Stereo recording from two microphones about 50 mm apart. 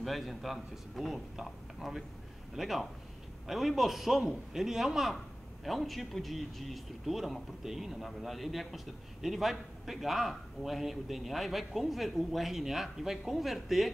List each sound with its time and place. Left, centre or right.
0.0 s a man's voice: centre